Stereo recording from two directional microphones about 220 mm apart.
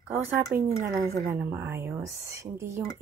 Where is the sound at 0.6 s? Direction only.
30° right (ahead or behind).